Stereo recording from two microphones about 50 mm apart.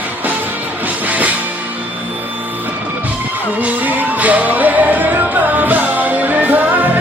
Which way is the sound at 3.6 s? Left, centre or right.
Right.